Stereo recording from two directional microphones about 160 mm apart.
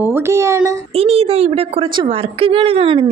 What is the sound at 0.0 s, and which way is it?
Speech, 15° right (ahead or behind).